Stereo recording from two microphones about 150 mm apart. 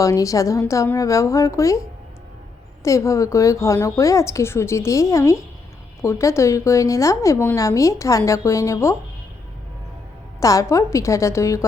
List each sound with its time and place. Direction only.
0.0 s a woman's voice: 20° left (ahead or behind)
2.8 s a woman's voice: 20° left (ahead or behind)
10.4 s a woman's voice: 20° left (ahead or behind)